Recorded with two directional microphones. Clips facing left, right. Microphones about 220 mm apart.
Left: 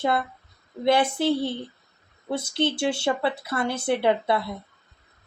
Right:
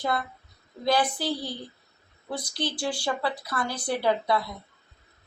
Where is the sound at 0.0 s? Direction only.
25° left (ahead or behind).